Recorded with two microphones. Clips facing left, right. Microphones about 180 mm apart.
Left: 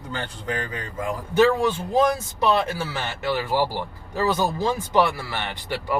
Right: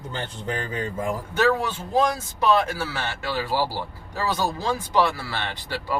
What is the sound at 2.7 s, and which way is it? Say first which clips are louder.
Speech: even; 20° left (ahead or behind).